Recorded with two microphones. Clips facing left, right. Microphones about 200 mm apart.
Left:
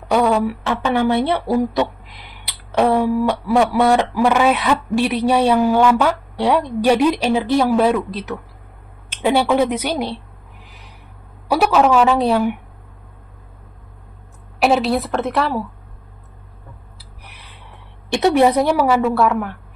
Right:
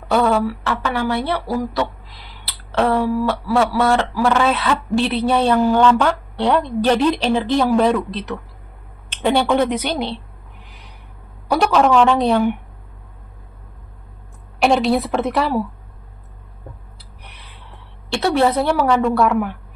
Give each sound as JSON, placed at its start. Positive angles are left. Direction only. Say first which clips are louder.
{"t": 0.1, "sound": "a woman's voice", "louder": "left 1 dB", "side_deg": 15}
{"t": 11.4, "sound": "a woman's voice", "louder": "left 1 dB", "side_deg": 5}
{"t": 14.6, "sound": "a woman's voice", "louder": "even", "side_deg": 5}
{"t": 18.1, "sound": "speech", "louder": "left 3 dB", "side_deg": 15}